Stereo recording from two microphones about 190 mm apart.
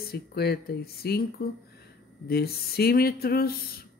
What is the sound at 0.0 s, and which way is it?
Speech, 55° left (ahead or behind).